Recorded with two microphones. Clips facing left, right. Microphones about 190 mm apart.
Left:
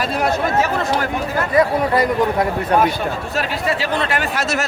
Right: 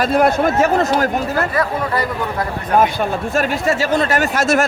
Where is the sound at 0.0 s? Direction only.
50° right (ahead or behind).